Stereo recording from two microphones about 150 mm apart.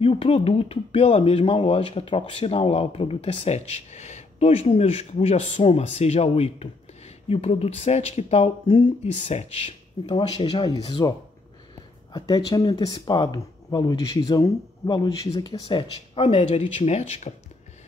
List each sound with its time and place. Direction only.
0.0 s speech: 40° left (ahead or behind)
16.7 s speech: 50° left (ahead or behind)